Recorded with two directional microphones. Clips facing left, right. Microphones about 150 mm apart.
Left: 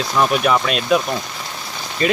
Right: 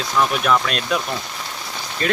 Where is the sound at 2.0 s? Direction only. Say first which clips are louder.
Left 3 dB; 5° left (ahead or behind).